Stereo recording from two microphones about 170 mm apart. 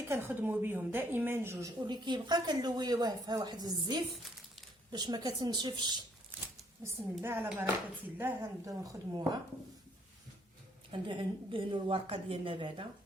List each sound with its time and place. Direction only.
0.1 s speech: 10° right (ahead or behind)
1.8 s a woman's voice: 25° right (ahead or behind)
6.8 s a woman's voice: 15° right (ahead or behind)
10.9 s a woman's voice: 30° right (ahead or behind)